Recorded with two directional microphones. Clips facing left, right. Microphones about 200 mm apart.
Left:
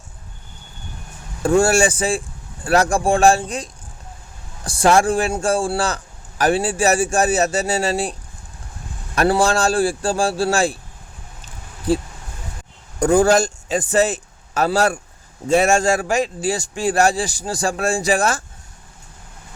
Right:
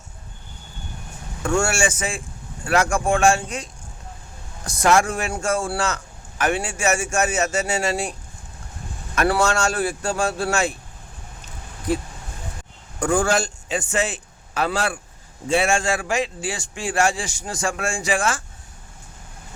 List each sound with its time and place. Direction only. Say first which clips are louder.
1.4 s a man's voice: left 6 dB; 35° left (ahead or behind)
9.1 s a man's voice: left 3 dB; 30° left (ahead or behind)
11.9 s a man's voice: left 4 dB; 30° left (ahead or behind)